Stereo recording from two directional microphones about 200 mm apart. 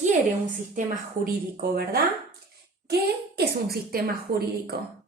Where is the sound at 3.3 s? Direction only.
50° right (ahead or behind).